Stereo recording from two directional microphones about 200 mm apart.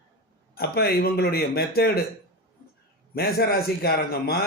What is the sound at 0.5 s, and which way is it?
A man's voice, 50° left (ahead or behind).